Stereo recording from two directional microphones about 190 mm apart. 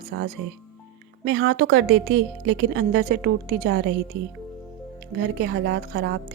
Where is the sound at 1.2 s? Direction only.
65° right (ahead or behind).